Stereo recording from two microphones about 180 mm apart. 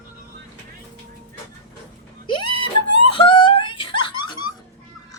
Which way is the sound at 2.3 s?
25° left (ahead or behind).